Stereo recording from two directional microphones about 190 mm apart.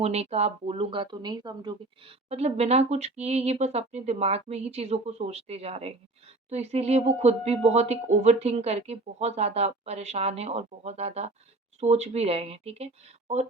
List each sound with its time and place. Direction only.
0.0 s speech: 35° right (ahead or behind)